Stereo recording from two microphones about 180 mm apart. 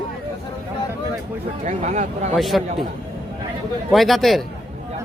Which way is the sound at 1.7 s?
40° right (ahead or behind).